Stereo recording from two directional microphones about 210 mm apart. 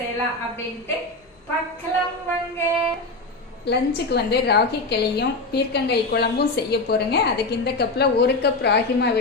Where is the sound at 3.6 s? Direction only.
50° left (ahead or behind).